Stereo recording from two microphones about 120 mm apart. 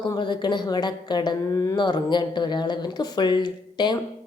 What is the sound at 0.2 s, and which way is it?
A woman's voice, 40° left (ahead or behind).